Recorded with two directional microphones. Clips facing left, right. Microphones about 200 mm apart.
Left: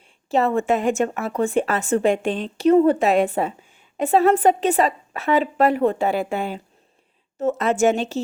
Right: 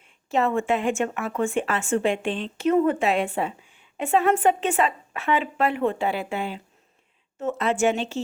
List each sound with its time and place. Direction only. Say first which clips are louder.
0.3 s speech: left 3 dB; 35° left (ahead or behind)